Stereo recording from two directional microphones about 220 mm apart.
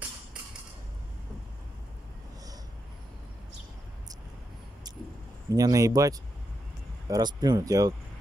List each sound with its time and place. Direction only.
5.5 s speech: 15° right (ahead or behind)